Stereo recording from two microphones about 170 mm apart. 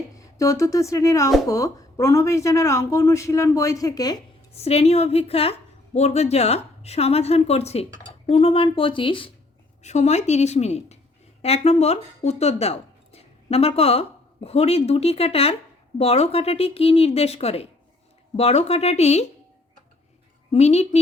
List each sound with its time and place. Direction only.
0.3 s speech: 20° left (ahead or behind)
4.5 s a woman's voice: 40° left (ahead or behind)
9.8 s a woman's voice: 40° left (ahead or behind)
20.5 s a woman's voice: 40° left (ahead or behind)